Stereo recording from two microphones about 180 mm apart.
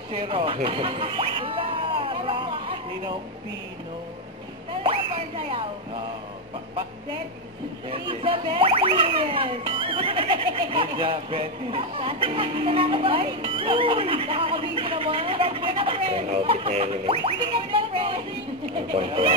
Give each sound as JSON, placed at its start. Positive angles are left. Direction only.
{"t": 0.2, "sound": "rodents", "side_deg": -30}
{"t": 4.8, "sound": "speech", "side_deg": -30}
{"t": 7.9, "sound": "speech", "side_deg": -30}